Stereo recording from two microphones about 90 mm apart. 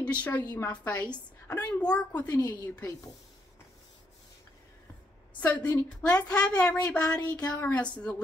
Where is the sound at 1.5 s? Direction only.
15° left (ahead or behind).